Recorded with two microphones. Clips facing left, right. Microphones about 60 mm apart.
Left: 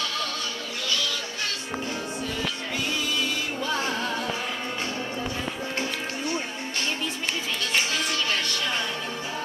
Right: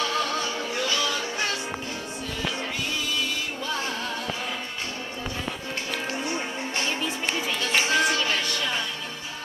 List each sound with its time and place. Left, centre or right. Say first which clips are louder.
0.0 s music: right 4 dB; right
6.1 s music: even; centre
6.9 s music: right 1 dB; centre
8.3 s music: even; centre